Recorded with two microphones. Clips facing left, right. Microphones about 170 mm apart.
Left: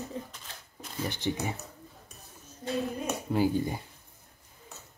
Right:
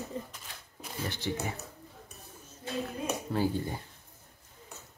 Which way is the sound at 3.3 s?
15° left (ahead or behind).